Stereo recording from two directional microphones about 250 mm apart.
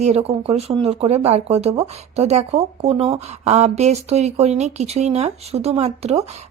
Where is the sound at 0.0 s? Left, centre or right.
Right.